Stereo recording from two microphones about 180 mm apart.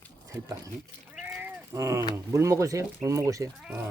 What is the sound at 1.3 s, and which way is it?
Cat, 15° right (ahead or behind).